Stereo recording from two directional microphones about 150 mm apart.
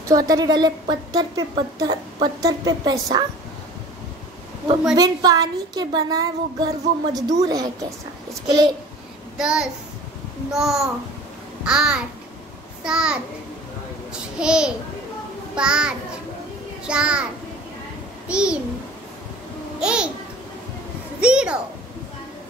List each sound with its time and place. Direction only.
0.1 s a woman's voice: 25° right (ahead or behind)
4.9 s a woman's voice: 25° right (ahead or behind)
9.4 s a child's voice: 5° right (ahead or behind)
14.4 s a child's voice: 5° right (ahead or behind)
18.3 s a child's voice: 5° right (ahead or behind)
19.8 s a child's voice: 5° right (ahead or behind)
21.2 s a child's voice: 5° right (ahead or behind)